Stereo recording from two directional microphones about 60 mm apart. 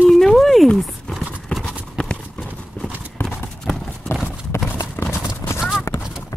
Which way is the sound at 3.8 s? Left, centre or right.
Left.